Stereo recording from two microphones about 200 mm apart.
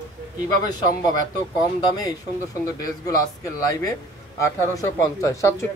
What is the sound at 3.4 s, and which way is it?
Speech, 15° left (ahead or behind).